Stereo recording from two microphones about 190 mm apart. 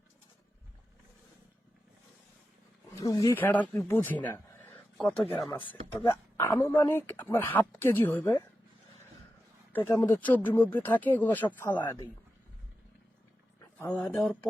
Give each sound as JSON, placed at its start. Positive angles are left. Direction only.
{"t": 2.9, "sound": "speech", "side_deg": 20}
{"t": 5.5, "sound": "speech", "side_deg": 25}
{"t": 6.1, "sound": "speech", "side_deg": 15}
{"t": 9.9, "sound": "speech", "side_deg": 20}
{"t": 10.2, "sound": "speech", "side_deg": 10}
{"t": 13.6, "sound": "speech", "side_deg": 10}